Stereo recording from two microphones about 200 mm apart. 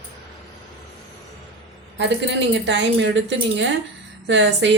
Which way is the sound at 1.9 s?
60° right (ahead or behind).